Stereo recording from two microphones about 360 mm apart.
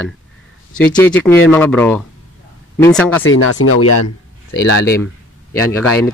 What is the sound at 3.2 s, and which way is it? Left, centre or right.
Speech, left.